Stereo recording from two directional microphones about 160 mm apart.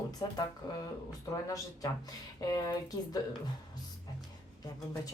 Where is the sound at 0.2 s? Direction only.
25° left (ahead or behind).